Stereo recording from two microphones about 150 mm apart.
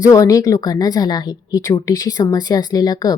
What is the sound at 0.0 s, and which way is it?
A woman's voice, 20° left (ahead or behind).